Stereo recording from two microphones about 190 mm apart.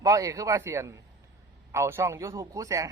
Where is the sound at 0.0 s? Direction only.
15° right (ahead or behind).